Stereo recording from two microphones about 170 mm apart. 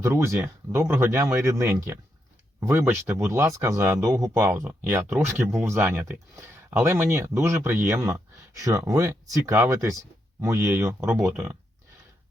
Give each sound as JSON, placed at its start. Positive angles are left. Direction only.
{"t": 0.0, "sound": "speech", "side_deg": -15}